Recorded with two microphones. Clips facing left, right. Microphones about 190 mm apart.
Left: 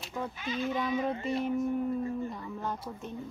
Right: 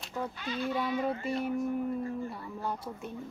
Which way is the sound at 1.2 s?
5° right (ahead or behind).